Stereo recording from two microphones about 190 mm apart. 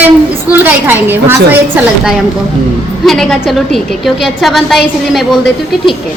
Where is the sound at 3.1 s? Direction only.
Centre (ahead or behind).